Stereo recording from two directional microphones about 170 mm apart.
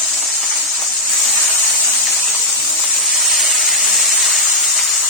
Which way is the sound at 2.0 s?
Centre (ahead or behind).